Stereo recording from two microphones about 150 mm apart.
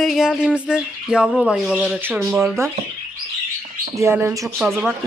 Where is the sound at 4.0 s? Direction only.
15° right (ahead or behind).